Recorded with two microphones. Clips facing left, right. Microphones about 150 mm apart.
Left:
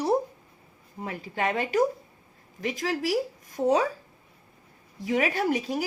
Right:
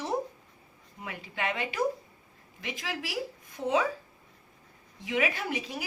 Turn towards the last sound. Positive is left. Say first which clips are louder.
# left 8 dB
turn(degrees=40)  # may be behind; listen again after turning